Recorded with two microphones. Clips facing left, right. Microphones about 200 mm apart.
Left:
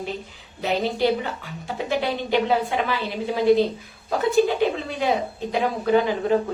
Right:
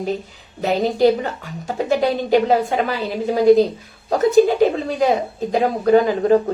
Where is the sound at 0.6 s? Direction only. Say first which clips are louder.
Right 6 dB; 45° right (ahead or behind).